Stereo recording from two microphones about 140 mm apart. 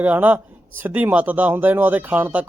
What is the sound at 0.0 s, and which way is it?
Speech, 10° right (ahead or behind).